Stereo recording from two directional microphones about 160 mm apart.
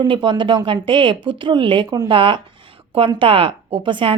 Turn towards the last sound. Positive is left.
turn(degrees=-30)  # may be behind; listen again after turning